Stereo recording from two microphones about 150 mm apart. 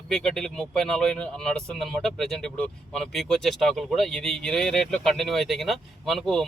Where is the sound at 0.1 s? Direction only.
Centre (ahead or behind).